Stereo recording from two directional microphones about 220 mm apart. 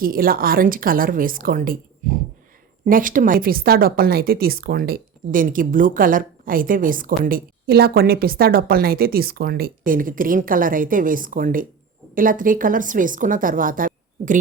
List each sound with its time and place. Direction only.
0.0 s a woman's voice: 40° right (ahead or behind)